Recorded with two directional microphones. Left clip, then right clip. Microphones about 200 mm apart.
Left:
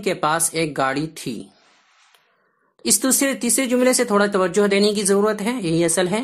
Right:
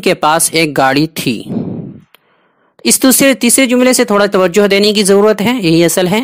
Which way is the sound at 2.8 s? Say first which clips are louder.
Right 11 dB; 35° right (ahead or behind).